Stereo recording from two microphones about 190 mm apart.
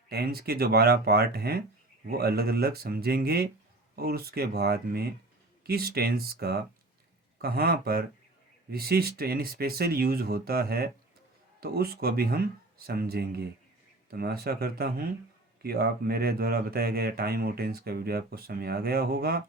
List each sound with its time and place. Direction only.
0.1 s speech: 55° right (ahead or behind)